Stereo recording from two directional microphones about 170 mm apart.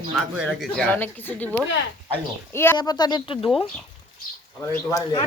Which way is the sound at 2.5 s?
15° left (ahead or behind).